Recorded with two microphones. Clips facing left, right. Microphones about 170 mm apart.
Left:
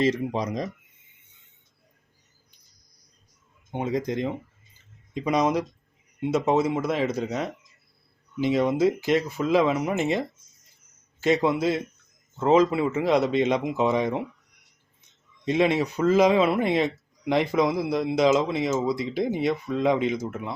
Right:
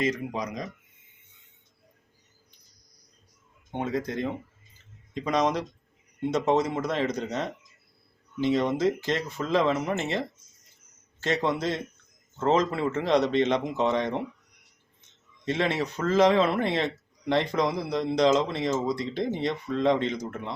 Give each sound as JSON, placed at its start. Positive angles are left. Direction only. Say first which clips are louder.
{"t": 0.0, "sound": "speech", "louder": "left 4 dB", "side_deg": 30}
{"t": 3.7, "sound": "speech", "louder": "left 3 dB", "side_deg": 10}